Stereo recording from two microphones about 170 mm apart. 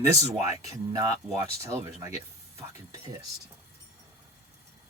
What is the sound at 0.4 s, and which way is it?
Speech, 20° right (ahead or behind).